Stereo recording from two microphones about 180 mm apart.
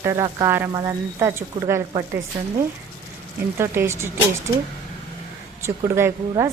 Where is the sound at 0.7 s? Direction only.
20° right (ahead or behind).